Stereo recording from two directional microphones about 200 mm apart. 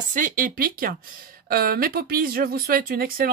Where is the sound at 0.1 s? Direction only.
45° right (ahead or behind).